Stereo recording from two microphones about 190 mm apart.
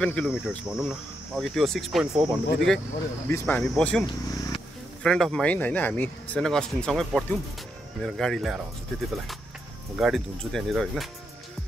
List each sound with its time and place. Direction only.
0.0 s speech: 5° left (ahead or behind)
3.3 s speech: 10° left (ahead or behind)
4.0 s speech: 25° left (ahead or behind)
5.0 s speech: 5° left (ahead or behind)
9.9 s speech: centre (ahead or behind)